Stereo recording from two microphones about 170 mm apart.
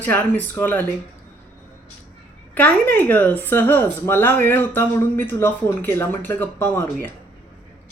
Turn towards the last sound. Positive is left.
turn(degrees=10)  # may be behind; listen again after turning